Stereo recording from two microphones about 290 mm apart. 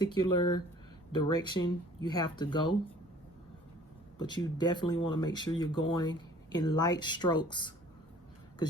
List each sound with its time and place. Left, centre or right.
0.3 s speech: centre
4.2 s speech: centre